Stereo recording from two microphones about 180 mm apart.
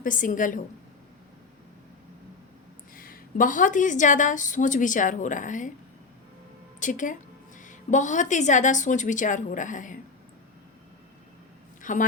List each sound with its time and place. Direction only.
0.0 s a woman's voice: 45° left (ahead or behind)
2.9 s a woman's voice: 50° left (ahead or behind)
6.7 s a woman's voice: 45° left (ahead or behind)
11.8 s speech: 45° left (ahead or behind)